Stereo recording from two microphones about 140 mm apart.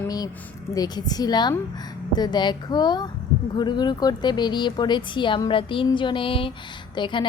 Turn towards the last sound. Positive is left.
turn(degrees=35)  # may be behind; listen again after turning